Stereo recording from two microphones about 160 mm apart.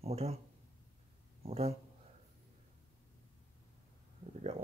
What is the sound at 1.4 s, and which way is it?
Speech, 40° right (ahead or behind).